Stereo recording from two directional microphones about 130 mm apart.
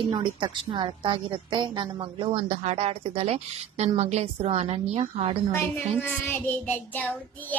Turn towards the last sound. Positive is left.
turn(degrees=15)  # may be behind; listen again after turning